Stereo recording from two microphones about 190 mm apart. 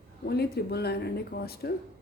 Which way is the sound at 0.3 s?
55° left (ahead or behind).